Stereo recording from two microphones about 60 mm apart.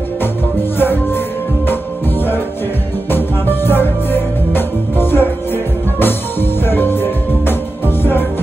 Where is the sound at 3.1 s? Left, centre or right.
Left.